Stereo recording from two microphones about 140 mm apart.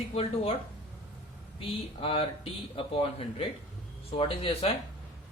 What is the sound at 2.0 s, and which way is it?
Speech, 45° left (ahead or behind).